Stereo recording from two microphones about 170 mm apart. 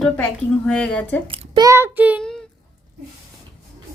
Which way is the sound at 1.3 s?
30° right (ahead or behind).